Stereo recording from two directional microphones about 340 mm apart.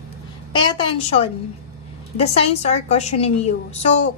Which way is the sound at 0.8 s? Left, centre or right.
Centre.